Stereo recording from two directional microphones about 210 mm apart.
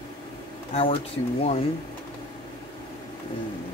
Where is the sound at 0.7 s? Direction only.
30° left (ahead or behind).